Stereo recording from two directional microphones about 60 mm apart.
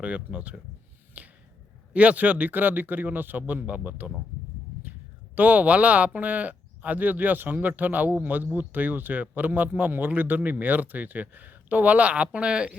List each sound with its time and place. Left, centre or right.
0.0 s speech: right
1.2 s finger snapping: right
1.9 s speech: right